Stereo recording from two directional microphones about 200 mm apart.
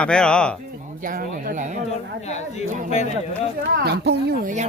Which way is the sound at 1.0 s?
45° right (ahead or behind).